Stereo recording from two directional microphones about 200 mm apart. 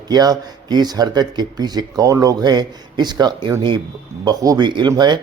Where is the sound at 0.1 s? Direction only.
20° right (ahead or behind).